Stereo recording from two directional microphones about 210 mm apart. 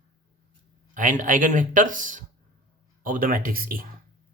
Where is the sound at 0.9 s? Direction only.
40° right (ahead or behind).